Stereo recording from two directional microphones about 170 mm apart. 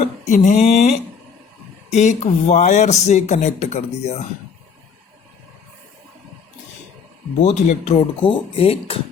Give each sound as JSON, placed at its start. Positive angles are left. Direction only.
{"t": 0.3, "sound": "speech", "side_deg": 45}
{"t": 7.4, "sound": "speech", "side_deg": 40}